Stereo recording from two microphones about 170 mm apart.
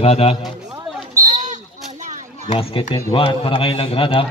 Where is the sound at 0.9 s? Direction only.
Centre (ahead or behind).